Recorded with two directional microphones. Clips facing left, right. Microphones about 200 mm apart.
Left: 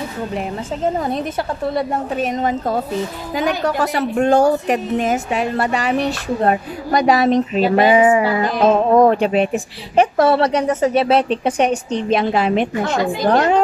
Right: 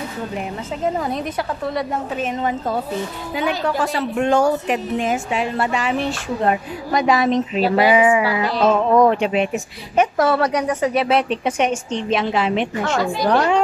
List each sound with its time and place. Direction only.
0.9 s a woman's voice: 30° left (ahead or behind); by 8.5 s 50° left (ahead or behind)
8.5 s a woman's voice: 20° left (ahead or behind)
8.7 s a woman's voice: 30° left (ahead or behind)
13.0 s a woman's voice: 20° left (ahead or behind)
13.3 s a woman's voice: 35° left (ahead or behind)